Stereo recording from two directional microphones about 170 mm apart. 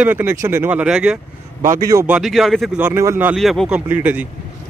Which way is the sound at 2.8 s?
15° right (ahead or behind).